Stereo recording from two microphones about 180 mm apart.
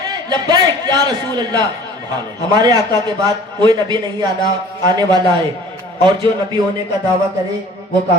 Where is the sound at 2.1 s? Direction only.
20° right (ahead or behind).